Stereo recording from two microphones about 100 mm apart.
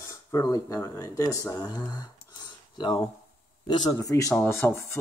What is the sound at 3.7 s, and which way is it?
Rub, 40° left (ahead or behind).